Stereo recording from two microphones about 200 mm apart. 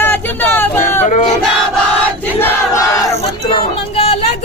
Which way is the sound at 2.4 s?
15° left (ahead or behind).